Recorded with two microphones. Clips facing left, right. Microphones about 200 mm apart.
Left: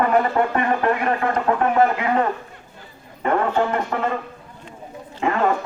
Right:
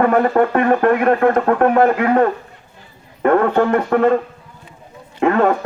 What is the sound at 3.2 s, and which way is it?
Speech, 55° right (ahead or behind).